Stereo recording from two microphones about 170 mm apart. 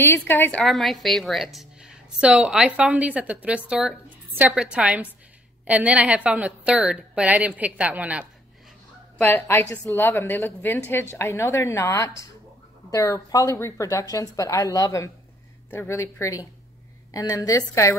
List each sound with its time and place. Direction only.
0.0 s a woman's voice: 15° left (ahead or behind); by 8.3 s 5° right (ahead or behind)
9.2 s a woman's voice: 10° left (ahead or behind)